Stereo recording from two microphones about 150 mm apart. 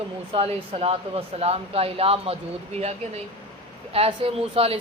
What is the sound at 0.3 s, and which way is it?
Speech, 40° right (ahead or behind).